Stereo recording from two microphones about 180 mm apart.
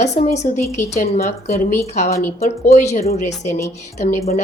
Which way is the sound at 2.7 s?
40° left (ahead or behind).